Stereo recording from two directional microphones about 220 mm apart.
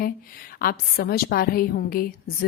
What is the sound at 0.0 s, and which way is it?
Speech, 40° left (ahead or behind).